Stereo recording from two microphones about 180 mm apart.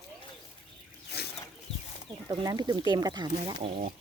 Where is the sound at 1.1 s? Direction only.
65° left (ahead or behind).